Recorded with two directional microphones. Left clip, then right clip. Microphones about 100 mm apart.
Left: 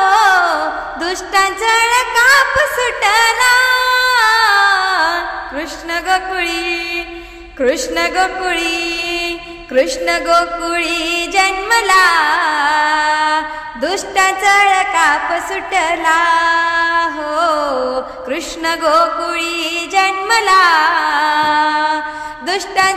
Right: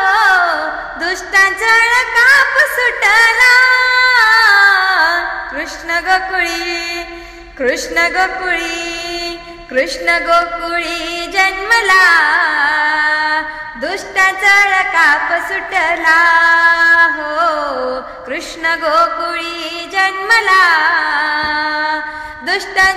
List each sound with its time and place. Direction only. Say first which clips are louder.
0.0 s music: even; 45° left (ahead or behind)
7.6 s music: right 1 dB; 45° left (ahead or behind)